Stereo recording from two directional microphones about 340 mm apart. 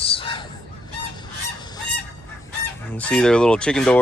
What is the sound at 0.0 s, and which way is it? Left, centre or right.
Honk, centre.